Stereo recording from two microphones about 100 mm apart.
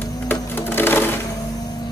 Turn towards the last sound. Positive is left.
turn(degrees=20)  # may be behind; listen again after turning